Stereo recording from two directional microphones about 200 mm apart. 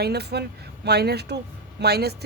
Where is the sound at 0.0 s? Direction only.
55° right (ahead or behind).